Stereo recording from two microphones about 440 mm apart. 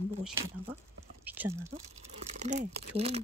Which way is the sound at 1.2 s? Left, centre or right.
Centre.